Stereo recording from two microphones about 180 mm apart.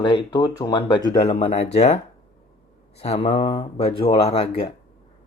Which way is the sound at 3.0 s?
35° left (ahead or behind).